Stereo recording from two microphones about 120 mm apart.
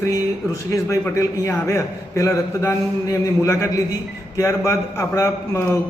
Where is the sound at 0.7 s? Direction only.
25° left (ahead or behind).